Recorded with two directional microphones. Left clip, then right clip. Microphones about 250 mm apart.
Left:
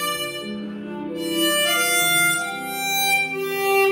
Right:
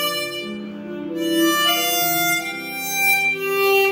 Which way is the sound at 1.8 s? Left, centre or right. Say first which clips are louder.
Left 1 dB; centre.